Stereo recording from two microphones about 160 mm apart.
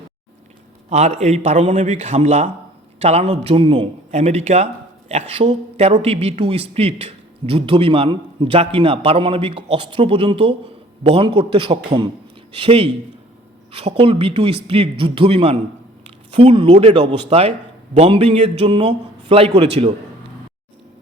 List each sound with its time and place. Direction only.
0.9 s a man's voice: 45° right (ahead or behind)